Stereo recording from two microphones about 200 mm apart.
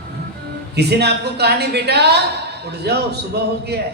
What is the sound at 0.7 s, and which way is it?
A woman's voice, 55° right (ahead or behind).